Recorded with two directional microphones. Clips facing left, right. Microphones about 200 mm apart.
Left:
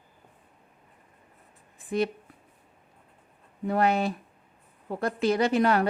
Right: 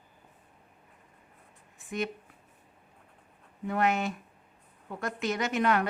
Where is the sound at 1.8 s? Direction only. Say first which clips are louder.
Left 7 dB; 35° left (ahead or behind).